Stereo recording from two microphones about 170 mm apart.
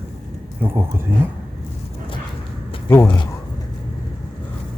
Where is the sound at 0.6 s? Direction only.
15° right (ahead or behind).